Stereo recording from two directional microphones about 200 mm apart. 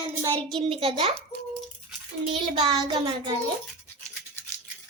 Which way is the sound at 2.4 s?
25° right (ahead or behind).